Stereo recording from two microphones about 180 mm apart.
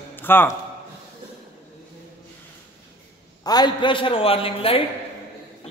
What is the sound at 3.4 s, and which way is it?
A man's voice, 20° left (ahead or behind).